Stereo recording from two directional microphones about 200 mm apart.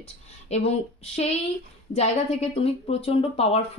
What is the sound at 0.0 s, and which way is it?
Speech, 30° left (ahead or behind).